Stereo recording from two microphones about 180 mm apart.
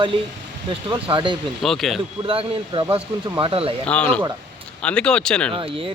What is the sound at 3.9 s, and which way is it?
Speech, 5° left (ahead or behind).